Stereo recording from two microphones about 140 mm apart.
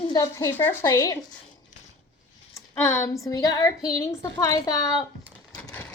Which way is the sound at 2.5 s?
20° left (ahead or behind).